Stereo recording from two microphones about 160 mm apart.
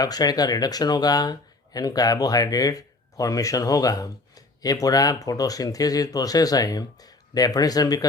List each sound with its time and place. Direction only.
0.0 s speech: 25° left (ahead or behind)